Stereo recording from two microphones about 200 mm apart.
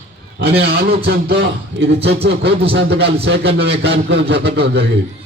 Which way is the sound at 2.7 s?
55° right (ahead or behind).